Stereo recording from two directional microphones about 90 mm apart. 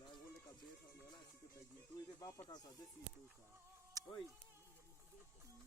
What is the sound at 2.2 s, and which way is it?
Speech, 40° left (ahead or behind).